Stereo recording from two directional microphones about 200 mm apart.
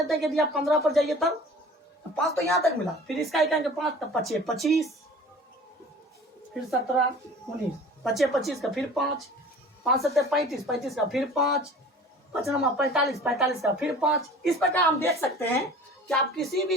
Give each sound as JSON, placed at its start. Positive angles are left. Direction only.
{"t": 0.0, "sound": "speech", "side_deg": 0}
{"t": 6.5, "sound": "speech", "side_deg": 0}
{"t": 8.0, "sound": "speech", "side_deg": 0}
{"t": 14.8, "sound": "a woman's voice", "side_deg": 15}
{"t": 16.0, "sound": "speech", "side_deg": 0}